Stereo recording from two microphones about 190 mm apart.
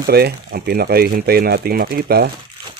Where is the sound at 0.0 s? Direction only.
55° right (ahead or behind).